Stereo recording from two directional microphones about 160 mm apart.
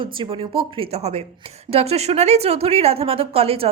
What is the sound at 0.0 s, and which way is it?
A woman's voice, 35° right (ahead or behind).